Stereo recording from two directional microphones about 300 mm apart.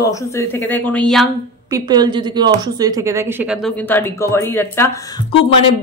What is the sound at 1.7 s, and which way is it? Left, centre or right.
A woman's voice, centre.